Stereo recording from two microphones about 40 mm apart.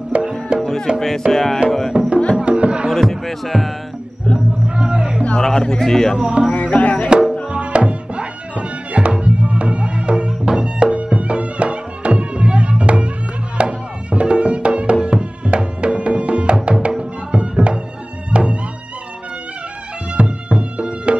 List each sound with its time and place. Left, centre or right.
0.1 s music: right
0.9 s speech: centre
2.3 s music: right
2.9 s speech: centre
4.6 s music: right
5.4 s speech: centre
6.1 s music: right
6.5 s music: left
7.4 s music: right
20.2 s music: right